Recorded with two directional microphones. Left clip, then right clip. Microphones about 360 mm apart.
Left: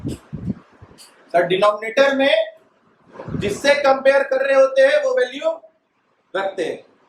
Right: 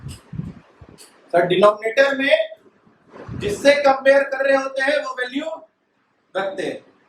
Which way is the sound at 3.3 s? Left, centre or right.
Centre.